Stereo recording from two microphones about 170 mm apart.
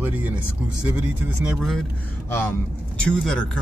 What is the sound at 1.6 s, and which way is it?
Speech, centre (ahead or behind).